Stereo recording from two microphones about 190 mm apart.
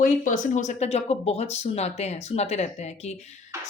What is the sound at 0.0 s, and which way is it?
Speech, 40° left (ahead or behind).